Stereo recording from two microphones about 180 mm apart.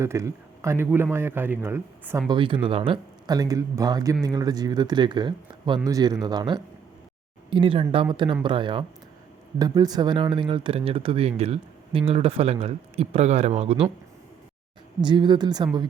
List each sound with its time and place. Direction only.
0.0 s speech: 15° right (ahead or behind); by 13.8 s 35° right (ahead or behind)
15.0 s speech: 25° right (ahead or behind)